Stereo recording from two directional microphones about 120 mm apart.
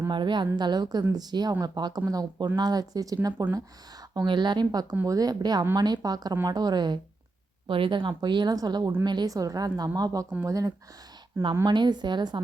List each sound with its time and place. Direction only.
0.1 s speech: 40° right (ahead or behind)